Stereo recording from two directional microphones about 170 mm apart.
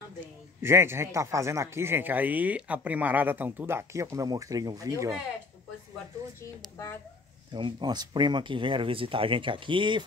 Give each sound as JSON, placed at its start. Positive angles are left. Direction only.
{"t": 0.6, "sound": "a man's voice", "side_deg": -15}
{"t": 7.5, "sound": "speech", "side_deg": -25}